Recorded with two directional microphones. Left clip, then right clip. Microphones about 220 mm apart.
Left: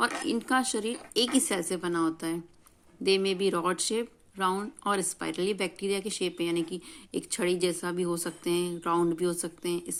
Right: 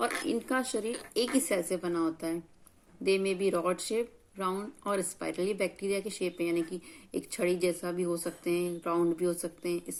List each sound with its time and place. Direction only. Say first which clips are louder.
0.3 s speech: left 3 dB; 50° left (ahead or behind)